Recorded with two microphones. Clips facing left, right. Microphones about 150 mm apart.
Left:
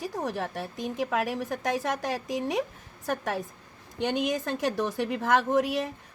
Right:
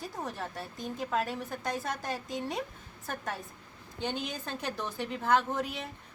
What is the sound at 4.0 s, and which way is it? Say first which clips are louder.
A woman's voice: left 8 dB; 80° left.